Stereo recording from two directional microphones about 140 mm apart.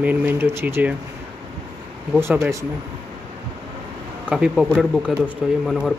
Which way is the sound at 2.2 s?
20° right (ahead or behind).